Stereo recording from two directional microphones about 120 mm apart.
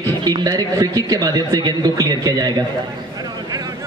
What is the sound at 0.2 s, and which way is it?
Speech, 35° right (ahead or behind).